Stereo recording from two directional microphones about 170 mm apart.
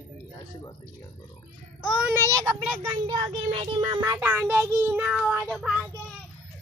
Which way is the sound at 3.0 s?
25° right (ahead or behind).